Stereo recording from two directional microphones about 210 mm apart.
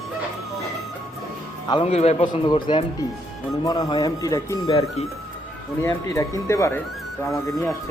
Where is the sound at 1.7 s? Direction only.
25° left (ahead or behind).